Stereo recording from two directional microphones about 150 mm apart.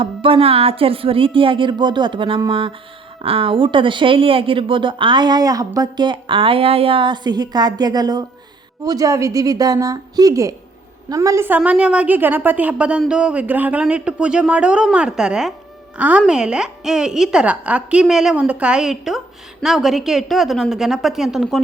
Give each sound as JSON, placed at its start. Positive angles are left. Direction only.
{"t": 0.0, "sound": "a woman's voice", "side_deg": -35}